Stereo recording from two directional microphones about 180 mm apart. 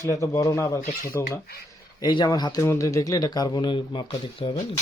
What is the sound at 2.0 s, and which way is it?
Speech, 25° left (ahead or behind).